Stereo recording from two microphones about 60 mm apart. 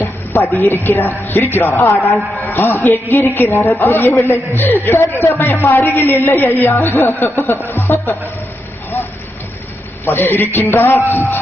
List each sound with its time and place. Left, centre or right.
0.0 s a woman's voice: left
3.7 s a woman's voice: left
4.1 s speech: left
4.5 s a woman's voice: left
6.9 s speech: left
7.3 s a woman's voice: left
10.1 s a woman's voice: left